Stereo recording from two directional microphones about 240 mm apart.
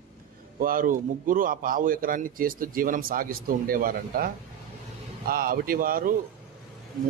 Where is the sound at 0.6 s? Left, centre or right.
Right.